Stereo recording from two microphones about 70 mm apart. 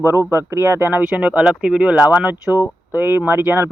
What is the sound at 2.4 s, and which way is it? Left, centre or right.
Speech, left.